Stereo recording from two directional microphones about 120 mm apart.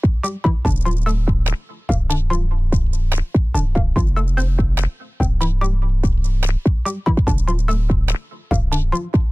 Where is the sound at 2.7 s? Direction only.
15° right (ahead or behind).